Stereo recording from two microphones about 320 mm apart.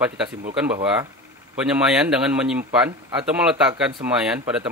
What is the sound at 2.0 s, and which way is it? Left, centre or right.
Speech, centre.